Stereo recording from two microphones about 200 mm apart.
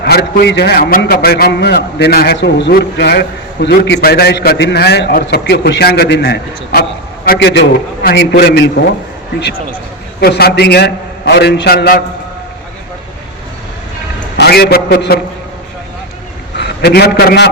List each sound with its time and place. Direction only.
0.0 s a man's voice: 50° left (ahead or behind)
10.2 s a man's voice: 50° left (ahead or behind)
14.3 s a man's voice: 55° left (ahead or behind)
16.6 s a man's voice: 55° left (ahead or behind)